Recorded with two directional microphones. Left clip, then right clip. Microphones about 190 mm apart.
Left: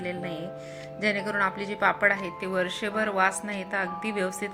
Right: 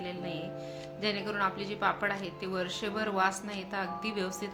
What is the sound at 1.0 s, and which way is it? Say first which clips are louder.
Speech: left 6 dB; 25° left (ahead or behind).